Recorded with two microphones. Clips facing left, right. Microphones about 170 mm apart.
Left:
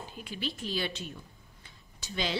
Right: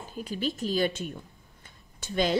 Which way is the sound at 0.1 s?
40° right (ahead or behind).